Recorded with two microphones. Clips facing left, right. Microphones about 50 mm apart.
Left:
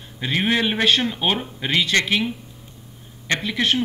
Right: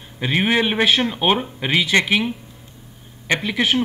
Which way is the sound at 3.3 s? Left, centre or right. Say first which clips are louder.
Right 2 dB; centre.